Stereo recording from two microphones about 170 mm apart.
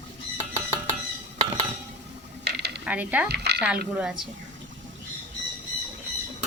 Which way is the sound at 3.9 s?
5° right (ahead or behind).